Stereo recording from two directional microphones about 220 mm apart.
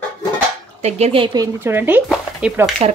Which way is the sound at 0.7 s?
30° right (ahead or behind).